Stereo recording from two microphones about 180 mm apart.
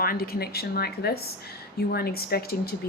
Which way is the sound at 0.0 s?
55° left (ahead or behind).